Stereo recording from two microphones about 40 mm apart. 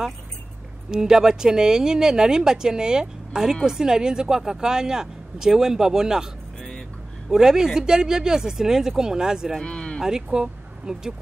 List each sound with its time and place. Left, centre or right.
0.9 s speech: centre
7.2 s speech: centre
9.6 s speech: left
10.0 s speech: centre